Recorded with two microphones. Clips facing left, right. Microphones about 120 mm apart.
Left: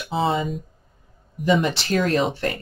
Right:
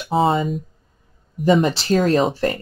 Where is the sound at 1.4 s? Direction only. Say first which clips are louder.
Right 4 dB; 35° right (ahead or behind).